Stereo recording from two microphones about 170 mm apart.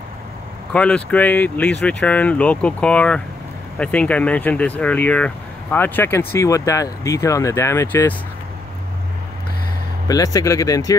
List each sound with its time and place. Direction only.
0.7 s speech: 5° left (ahead or behind)
10.0 s speech: 20° left (ahead or behind)